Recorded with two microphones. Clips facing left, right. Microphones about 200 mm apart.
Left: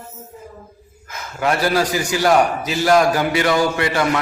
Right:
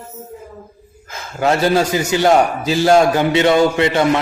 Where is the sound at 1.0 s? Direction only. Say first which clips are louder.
Right 3 dB; 25° right (ahead or behind).